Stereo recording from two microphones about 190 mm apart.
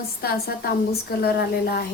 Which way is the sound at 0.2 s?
55° left (ahead or behind).